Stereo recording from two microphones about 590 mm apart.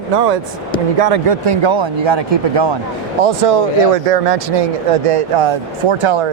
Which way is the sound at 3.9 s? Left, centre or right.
Right.